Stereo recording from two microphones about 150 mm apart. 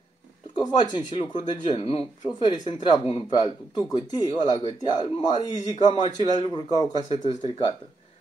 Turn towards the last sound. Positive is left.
turn(degrees=40)  # may be behind; listen again after turning